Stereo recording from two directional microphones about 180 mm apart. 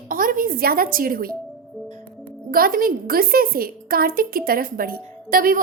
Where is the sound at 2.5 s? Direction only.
55° right (ahead or behind).